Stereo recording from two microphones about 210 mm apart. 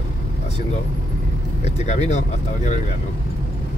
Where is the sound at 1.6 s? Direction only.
30° left (ahead or behind).